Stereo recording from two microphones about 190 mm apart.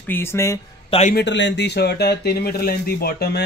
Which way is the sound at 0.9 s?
35° left (ahead or behind).